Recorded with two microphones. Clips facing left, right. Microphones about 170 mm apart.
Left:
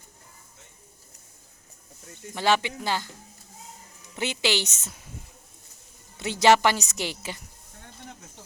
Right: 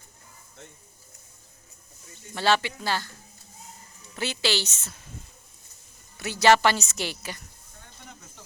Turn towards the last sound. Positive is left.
turn(degrees=20)  # may be behind; listen again after turning